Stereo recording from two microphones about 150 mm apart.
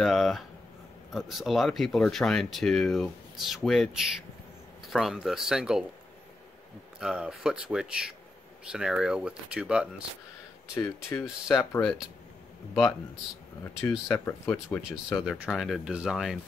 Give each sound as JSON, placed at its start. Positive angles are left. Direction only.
{"t": 0.0, "sound": "speech", "side_deg": 0}
{"t": 7.0, "sound": "speech", "side_deg": -5}
{"t": 10.7, "sound": "speech", "side_deg": 20}
{"t": 13.7, "sound": "speech", "side_deg": 15}
{"t": 15.2, "sound": "speech", "side_deg": -5}